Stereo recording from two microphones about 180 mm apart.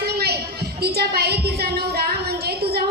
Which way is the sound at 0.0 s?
60° right (ahead or behind).